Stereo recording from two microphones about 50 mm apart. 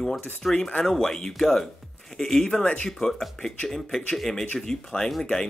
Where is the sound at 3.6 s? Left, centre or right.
Centre.